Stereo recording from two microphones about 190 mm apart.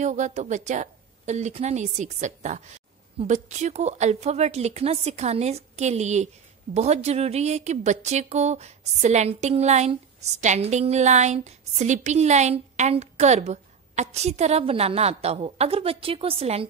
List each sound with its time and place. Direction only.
0.0 s a woman's voice: 40° right (ahead or behind)